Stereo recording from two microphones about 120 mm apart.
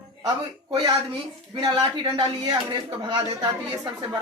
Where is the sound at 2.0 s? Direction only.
40° right (ahead or behind).